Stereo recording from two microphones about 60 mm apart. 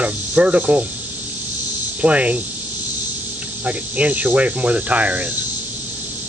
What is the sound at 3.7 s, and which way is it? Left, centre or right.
Speech, right.